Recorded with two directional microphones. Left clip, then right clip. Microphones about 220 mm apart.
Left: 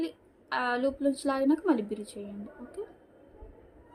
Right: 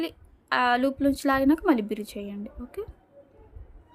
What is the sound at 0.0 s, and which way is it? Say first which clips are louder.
A woman's voice: right 3 dB; 45° right (ahead or behind).